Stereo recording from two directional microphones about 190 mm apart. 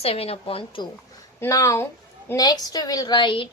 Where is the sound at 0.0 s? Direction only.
30° left (ahead or behind).